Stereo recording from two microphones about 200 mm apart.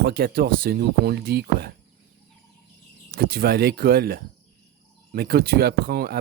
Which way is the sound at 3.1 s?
50° right (ahead or behind).